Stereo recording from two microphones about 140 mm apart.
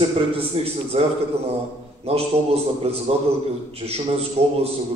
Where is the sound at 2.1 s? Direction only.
45° right (ahead or behind).